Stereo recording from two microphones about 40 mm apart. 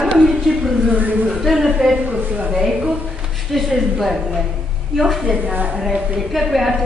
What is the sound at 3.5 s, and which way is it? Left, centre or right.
A woman's voice, centre.